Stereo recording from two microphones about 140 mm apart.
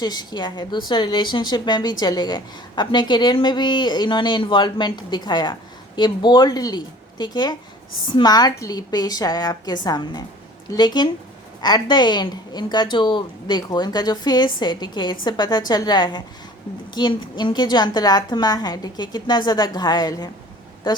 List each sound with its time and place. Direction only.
0.0 s a woman's voice: 30° left (ahead or behind)